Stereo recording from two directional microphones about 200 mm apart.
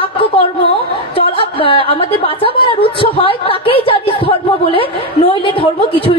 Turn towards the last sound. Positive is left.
turn(degrees=25)  # may be behind; listen again after turning